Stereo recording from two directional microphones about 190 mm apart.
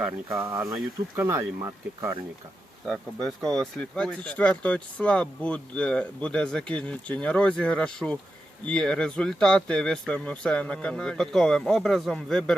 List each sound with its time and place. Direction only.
0.3 s speech: 15° right (ahead or behind)
0.7 s speech: centre (ahead or behind)
1.2 s speech: 15° right (ahead or behind)
2.8 s speech: 5° left (ahead or behind)